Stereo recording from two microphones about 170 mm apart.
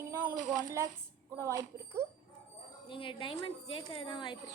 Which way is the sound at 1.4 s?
20° right (ahead or behind).